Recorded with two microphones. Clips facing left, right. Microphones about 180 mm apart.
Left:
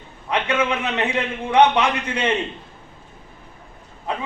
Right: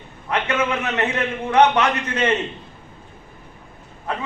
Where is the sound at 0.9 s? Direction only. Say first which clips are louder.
Right 1 dB; 15° left (ahead or behind).